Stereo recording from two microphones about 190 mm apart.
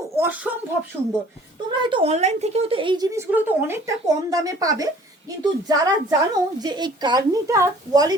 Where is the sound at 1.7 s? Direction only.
25° right (ahead or behind).